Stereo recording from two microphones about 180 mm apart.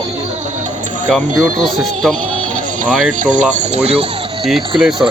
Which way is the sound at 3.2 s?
45° right (ahead or behind).